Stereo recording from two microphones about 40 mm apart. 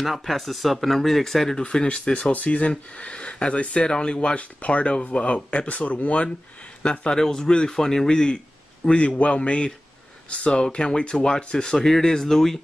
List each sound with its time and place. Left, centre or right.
0.0 s speech: centre
1.6 s speech: left
2.3 s speech: left
7.2 s speech: centre
8.8 s speech: left; by 12.5 s centre